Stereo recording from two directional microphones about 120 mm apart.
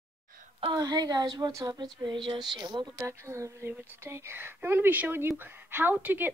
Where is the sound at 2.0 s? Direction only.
40° right (ahead or behind).